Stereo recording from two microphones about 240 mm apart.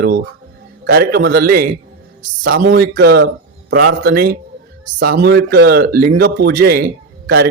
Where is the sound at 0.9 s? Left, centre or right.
Right.